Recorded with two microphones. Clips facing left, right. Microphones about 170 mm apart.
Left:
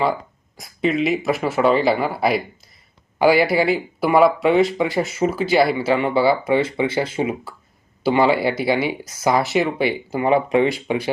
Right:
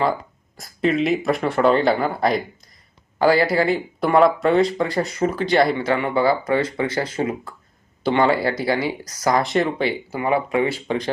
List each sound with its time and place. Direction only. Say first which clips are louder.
0.0 s speech: even; centre (ahead or behind)
6.5 s speech: left 2 dB; 25° left (ahead or behind)
7.2 s speech: left 1 dB; 10° left (ahead or behind)
8.3 s speech: left 2 dB; 25° left (ahead or behind)
9.3 s speech: left 1 dB; 5° left (ahead or behind)
9.8 s speech: left 3 dB; 15° left (ahead or behind)